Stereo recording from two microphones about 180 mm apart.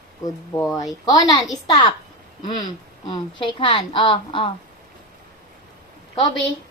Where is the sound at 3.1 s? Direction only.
25° left (ahead or behind).